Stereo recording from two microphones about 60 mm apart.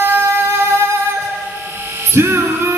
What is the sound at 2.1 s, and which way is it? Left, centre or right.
Music, right.